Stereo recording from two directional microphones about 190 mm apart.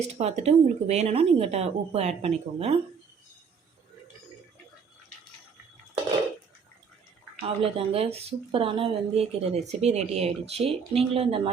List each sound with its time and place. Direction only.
0.0 s speech: 35° right (ahead or behind)
7.4 s speech: 30° right (ahead or behind)